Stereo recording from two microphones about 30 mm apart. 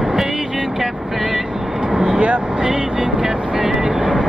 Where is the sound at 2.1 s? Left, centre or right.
Right.